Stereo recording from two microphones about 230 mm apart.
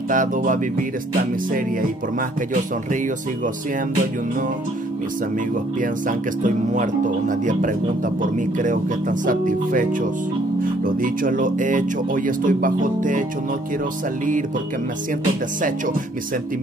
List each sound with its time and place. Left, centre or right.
0.1 s speech: right
5.8 s speech: right